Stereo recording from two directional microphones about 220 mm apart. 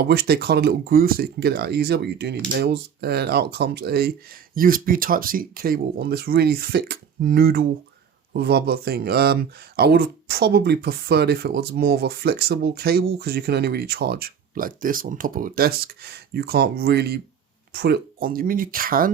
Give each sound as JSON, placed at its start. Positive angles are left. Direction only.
{"t": 0.0, "sound": "speech", "side_deg": -45}